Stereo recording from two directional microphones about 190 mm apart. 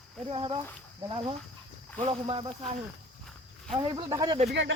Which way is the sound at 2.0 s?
25° right (ahead or behind).